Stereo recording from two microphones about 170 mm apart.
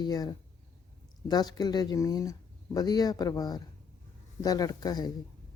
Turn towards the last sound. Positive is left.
turn(degrees=25)  # may be behind; listen again after turning